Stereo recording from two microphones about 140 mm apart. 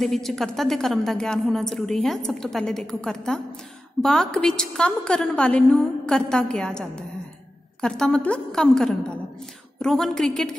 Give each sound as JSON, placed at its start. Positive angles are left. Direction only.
{"t": 0.0, "sound": "a woman's voice", "side_deg": 0}